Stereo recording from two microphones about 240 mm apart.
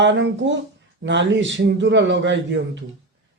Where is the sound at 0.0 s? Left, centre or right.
Right.